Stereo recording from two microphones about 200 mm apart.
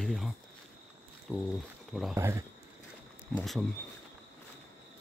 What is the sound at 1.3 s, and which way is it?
Speech, centre (ahead or behind).